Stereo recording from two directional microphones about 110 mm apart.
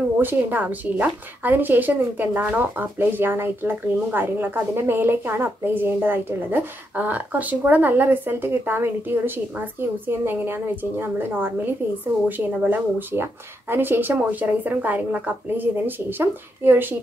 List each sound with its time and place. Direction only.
0.2 s a woman's voice: 15° right (ahead or behind)